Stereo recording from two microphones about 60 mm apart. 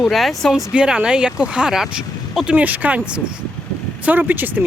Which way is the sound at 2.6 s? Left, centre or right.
Right.